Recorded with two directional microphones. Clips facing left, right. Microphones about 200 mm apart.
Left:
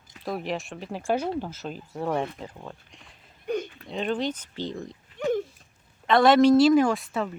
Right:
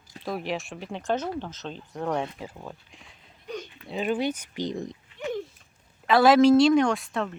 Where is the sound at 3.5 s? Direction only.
55° left (ahead or behind).